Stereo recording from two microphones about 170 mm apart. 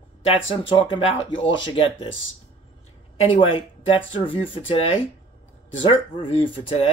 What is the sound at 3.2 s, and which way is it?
Speech, 30° left (ahead or behind).